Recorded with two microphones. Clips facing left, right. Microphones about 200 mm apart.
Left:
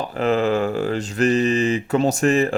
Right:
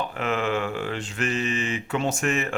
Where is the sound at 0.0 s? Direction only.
35° left (ahead or behind).